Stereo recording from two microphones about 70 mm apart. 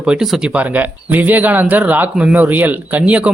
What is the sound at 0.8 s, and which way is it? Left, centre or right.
Speech, right.